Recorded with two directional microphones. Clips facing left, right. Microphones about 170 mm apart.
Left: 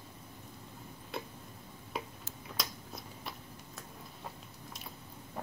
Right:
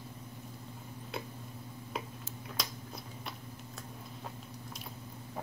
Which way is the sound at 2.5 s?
Centre (ahead or behind).